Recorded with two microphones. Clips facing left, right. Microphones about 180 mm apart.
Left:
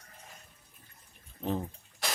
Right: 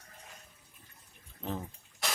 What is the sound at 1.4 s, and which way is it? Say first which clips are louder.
Speech: left 5 dB; 20° left (ahead or behind).